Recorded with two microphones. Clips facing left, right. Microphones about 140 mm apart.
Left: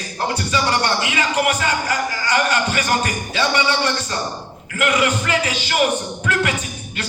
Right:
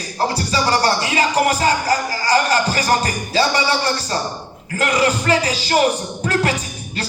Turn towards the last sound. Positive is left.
turn(degrees=-35)  # may be behind; listen again after turning